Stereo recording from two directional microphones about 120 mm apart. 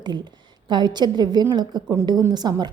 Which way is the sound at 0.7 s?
35° right (ahead or behind).